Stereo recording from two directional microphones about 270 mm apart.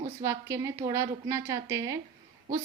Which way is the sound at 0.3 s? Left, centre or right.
Centre.